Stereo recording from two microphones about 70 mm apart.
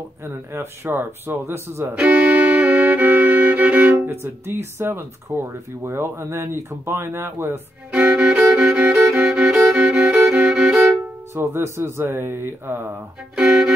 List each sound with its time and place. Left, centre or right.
0.2 s speech: right
2.0 s music: right
4.1 s speech: right
7.9 s violin: centre
9.1 s music: right
9.4 s violin: centre
11.3 s speech: right
13.4 s music: centre